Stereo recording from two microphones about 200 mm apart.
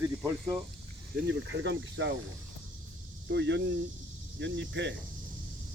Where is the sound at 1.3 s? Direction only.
65° right (ahead or behind).